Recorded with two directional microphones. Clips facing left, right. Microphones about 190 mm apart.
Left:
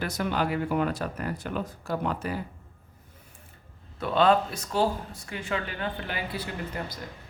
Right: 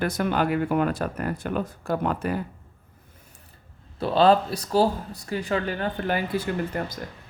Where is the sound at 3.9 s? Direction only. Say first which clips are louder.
Right 4 dB; 35° right (ahead or behind); by 6.9 s 50° right (ahead or behind).